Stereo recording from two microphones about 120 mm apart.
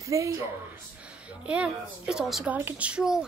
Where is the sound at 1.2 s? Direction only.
10° right (ahead or behind).